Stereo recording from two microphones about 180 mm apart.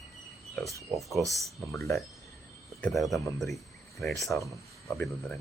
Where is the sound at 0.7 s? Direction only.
15° right (ahead or behind).